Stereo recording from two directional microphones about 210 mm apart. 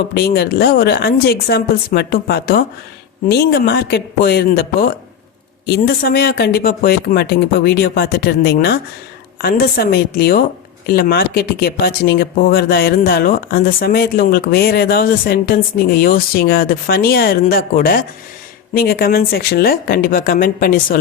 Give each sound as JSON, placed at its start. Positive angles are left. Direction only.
{"t": 0.1, "sound": "speech", "side_deg": 50}